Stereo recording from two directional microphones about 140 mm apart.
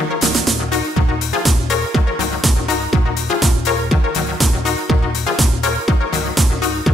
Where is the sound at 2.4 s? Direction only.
Centre (ahead or behind).